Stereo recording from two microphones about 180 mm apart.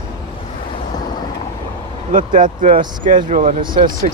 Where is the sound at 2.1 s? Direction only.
45° right (ahead or behind).